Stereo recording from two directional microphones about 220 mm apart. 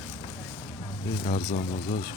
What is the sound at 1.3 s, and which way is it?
Speech, 30° left (ahead or behind).